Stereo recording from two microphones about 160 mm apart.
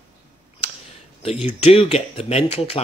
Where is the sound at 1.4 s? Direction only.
35° left (ahead or behind).